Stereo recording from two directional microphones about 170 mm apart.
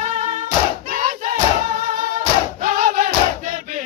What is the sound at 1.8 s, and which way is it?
Music, 50° right (ahead or behind).